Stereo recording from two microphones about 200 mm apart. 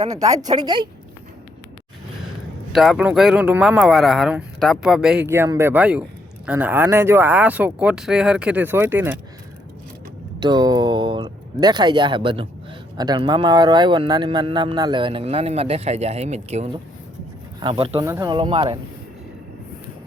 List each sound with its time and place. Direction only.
0.0 s a woman's voice: 15° right (ahead or behind)
2.7 s speech: centre (ahead or behind)
10.4 s speech: 20° right (ahead or behind)